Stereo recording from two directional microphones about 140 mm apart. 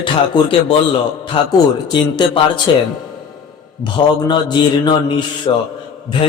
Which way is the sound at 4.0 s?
35° left (ahead or behind).